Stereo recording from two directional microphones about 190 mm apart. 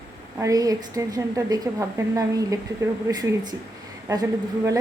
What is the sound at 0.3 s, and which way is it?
A woman's voice, 15° right (ahead or behind).